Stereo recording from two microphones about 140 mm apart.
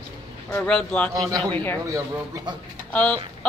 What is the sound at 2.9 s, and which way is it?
Speech, 10° left (ahead or behind).